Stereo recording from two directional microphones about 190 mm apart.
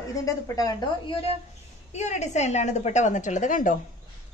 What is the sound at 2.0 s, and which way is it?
A woman's voice, 40° left (ahead or behind).